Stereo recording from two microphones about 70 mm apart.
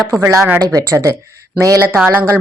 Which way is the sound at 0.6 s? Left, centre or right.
Right.